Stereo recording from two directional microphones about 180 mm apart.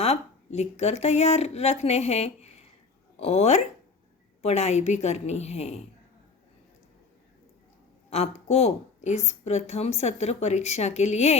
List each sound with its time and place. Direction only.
0.0 s a woman's voice: 35° left (ahead or behind)
8.1 s a woman's voice: 35° left (ahead or behind)